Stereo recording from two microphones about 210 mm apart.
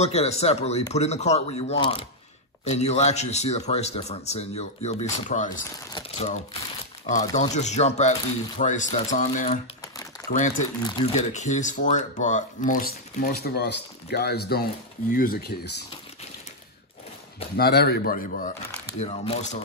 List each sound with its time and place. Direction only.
0.0 s speech: 30° left (ahead or behind)
10.8 s speech: 20° left (ahead or behind); by 15.5 s 45° left (ahead or behind)
17.6 s speech: 50° left (ahead or behind)
18.9 s speech: 30° left (ahead or behind)